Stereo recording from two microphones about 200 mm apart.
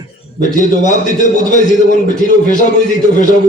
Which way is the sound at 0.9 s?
40° left (ahead or behind).